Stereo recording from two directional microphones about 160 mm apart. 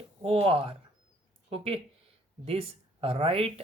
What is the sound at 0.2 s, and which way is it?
Speech, 35° right (ahead or behind).